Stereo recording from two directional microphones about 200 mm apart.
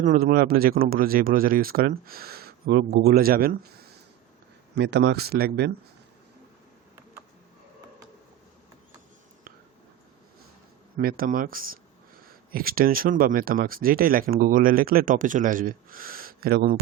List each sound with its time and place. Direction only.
0.0 s speech: 45° right (ahead or behind)
4.8 s speech: 60° right (ahead or behind)
10.9 s speech: 45° right (ahead or behind)